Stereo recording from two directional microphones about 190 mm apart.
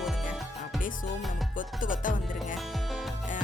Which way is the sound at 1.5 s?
45° left (ahead or behind).